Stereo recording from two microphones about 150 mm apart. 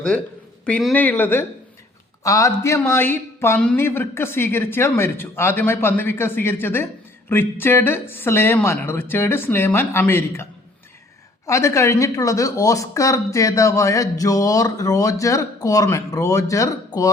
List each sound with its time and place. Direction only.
0.6 s a man's voice: 5° left (ahead or behind)
11.4 s speech: 20° left (ahead or behind)